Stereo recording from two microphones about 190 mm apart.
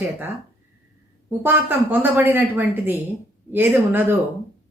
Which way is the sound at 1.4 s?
10° right (ahead or behind).